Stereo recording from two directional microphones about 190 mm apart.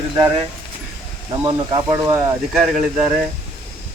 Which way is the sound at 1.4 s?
20° right (ahead or behind).